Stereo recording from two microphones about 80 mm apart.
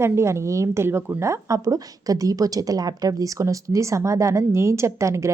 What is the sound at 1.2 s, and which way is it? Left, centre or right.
A woman's voice, right.